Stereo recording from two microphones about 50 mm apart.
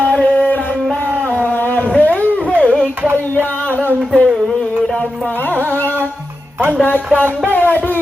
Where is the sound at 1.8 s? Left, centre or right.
Left.